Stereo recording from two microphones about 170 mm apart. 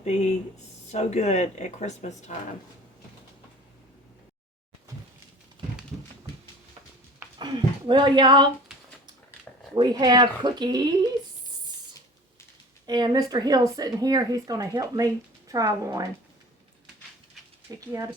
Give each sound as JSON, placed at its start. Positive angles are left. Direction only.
{"t": 0.0, "sound": "a sound", "side_deg": 40}
{"t": 0.9, "sound": "speech", "side_deg": 40}
{"t": 7.3, "sound": "a sound", "side_deg": -25}
{"t": 9.7, "sound": "speech", "side_deg": -25}
{"t": 12.8, "sound": "speech", "side_deg": -25}
{"t": 17.7, "sound": "speech", "side_deg": -20}